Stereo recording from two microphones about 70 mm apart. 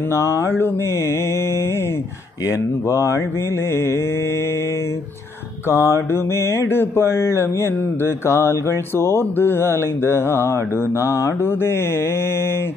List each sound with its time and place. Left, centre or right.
0.1 s mantra: left
2.4 s speech: left
5.7 s mantra: left